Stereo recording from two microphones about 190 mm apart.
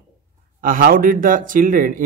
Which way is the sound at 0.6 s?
50° right (ahead or behind).